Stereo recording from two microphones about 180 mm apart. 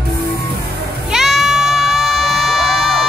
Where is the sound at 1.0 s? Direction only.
Centre (ahead or behind).